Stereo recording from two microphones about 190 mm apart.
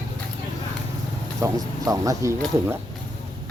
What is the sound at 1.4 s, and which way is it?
Speech, 20° right (ahead or behind).